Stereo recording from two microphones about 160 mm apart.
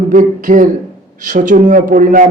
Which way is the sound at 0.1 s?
55° right (ahead or behind).